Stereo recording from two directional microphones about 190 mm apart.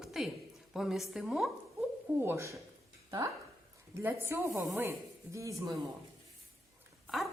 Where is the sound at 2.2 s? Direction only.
15° right (ahead or behind).